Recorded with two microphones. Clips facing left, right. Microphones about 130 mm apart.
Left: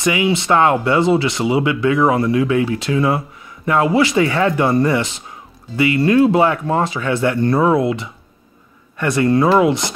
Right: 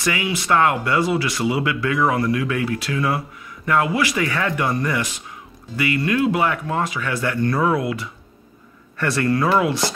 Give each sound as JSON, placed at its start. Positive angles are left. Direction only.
{"t": 0.0, "sound": "speech", "side_deg": 20}